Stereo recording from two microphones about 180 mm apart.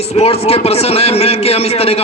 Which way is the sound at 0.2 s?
35° left (ahead or behind).